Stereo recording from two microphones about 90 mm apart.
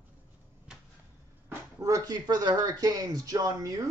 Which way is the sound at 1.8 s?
45° right (ahead or behind).